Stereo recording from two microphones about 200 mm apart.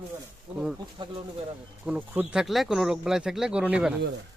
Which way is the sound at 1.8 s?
5° right (ahead or behind).